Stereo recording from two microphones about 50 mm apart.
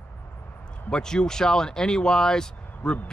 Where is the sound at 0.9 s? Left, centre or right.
Centre.